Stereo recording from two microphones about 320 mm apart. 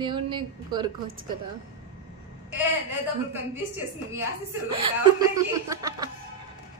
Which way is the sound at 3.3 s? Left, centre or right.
Centre.